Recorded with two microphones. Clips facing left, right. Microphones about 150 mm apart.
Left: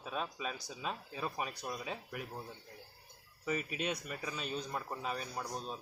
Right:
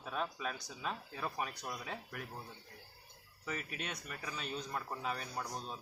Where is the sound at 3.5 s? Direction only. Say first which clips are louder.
Left 6 dB; 15° left (ahead or behind).